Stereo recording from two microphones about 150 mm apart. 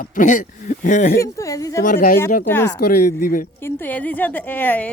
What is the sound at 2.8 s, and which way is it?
Speech, 90° left.